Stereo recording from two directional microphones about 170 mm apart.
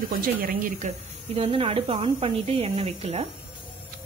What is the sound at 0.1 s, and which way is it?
Speech, 60° right (ahead or behind).